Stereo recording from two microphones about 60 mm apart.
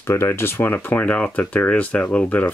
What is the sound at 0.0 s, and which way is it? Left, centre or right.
Speech, left.